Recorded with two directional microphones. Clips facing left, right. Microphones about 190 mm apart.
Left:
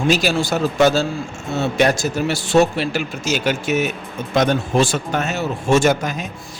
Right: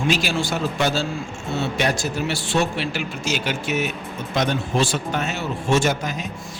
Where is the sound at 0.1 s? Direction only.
40° left (ahead or behind).